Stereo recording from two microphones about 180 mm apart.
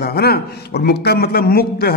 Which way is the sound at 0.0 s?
60° left (ahead or behind).